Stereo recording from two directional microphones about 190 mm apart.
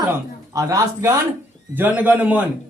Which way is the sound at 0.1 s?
20° right (ahead or behind).